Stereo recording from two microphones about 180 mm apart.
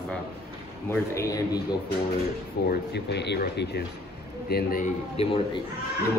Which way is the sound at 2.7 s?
70° left (ahead or behind).